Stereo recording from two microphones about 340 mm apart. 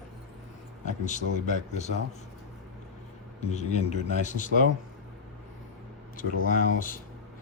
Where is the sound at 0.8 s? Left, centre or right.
Left.